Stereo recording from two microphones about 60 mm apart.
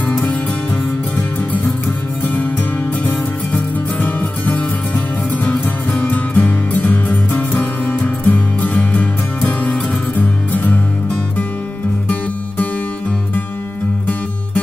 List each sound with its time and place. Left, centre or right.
0.1 s music: left
3.0 s music: left